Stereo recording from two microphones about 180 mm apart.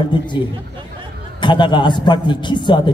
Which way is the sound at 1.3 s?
25° left (ahead or behind).